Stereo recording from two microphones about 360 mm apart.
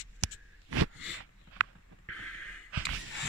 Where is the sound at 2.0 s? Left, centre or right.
Left.